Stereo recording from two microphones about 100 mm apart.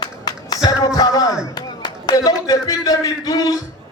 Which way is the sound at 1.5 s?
40° left (ahead or behind).